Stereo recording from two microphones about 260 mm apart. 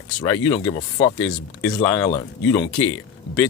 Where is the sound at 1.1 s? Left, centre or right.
Left.